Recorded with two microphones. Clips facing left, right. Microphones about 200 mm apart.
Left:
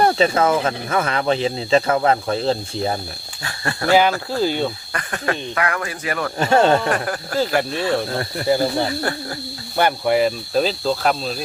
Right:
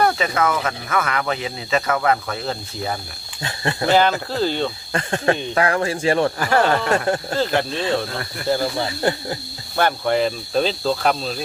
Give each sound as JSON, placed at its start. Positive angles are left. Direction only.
{"t": 0.0, "sound": "speech", "side_deg": 30}
{"t": 3.4, "sound": "speech", "side_deg": -20}
{"t": 4.3, "sound": "speech", "side_deg": 10}
{"t": 4.9, "sound": "speech", "side_deg": -25}
{"t": 6.4, "sound": "speech", "side_deg": 25}
{"t": 6.9, "sound": "speech", "side_deg": -25}
{"t": 7.3, "sound": "speech", "side_deg": 10}
{"t": 9.1, "sound": "speech", "side_deg": -20}
{"t": 9.7, "sound": "speech", "side_deg": 10}